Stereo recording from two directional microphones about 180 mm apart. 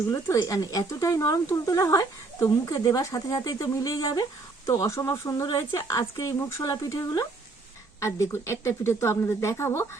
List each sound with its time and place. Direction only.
0.1 s speech: 20° left (ahead or behind)